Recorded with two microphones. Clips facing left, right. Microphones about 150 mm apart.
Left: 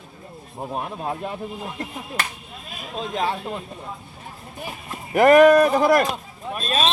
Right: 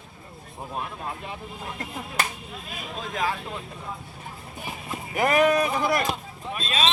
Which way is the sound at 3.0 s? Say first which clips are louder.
Left 4 dB; 25° left (ahead or behind).